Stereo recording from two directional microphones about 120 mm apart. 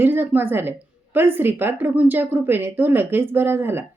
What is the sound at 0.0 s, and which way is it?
A woman's voice, 15° right (ahead or behind).